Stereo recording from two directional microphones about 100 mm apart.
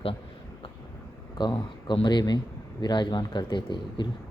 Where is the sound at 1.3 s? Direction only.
50° left (ahead or behind).